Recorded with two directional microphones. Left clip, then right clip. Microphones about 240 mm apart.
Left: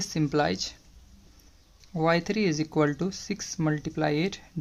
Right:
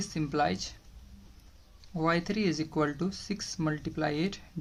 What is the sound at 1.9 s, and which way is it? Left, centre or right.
Speech, left.